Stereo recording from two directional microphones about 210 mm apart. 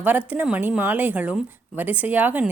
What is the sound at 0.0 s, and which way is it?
A woman's voice, 5° right (ahead or behind).